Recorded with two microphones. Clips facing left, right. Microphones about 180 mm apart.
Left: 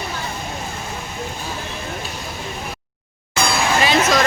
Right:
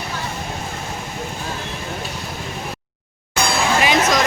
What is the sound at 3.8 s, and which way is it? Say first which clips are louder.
Music: left 1 dB; 15° right (ahead or behind).